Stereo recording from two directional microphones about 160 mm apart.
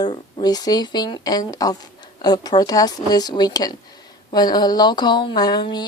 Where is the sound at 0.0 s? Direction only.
25° left (ahead or behind).